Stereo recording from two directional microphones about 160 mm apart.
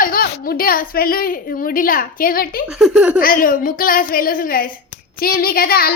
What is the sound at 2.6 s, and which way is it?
Speech, centre (ahead or behind).